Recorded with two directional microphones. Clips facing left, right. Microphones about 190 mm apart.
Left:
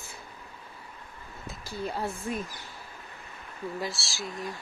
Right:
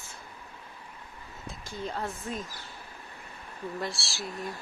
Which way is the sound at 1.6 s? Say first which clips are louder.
Left 2 dB; 10° left (ahead or behind).